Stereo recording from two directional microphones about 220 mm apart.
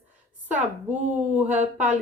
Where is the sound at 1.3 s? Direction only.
5° right (ahead or behind).